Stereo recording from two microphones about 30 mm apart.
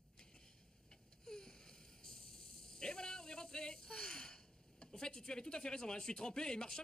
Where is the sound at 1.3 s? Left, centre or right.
Left.